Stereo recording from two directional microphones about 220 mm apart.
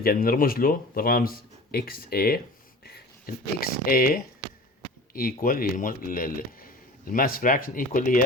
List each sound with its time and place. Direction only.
0.0 s speech: 40° left (ahead or behind)